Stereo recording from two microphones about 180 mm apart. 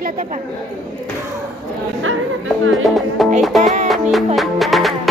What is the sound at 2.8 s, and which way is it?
Music, centre (ahead or behind).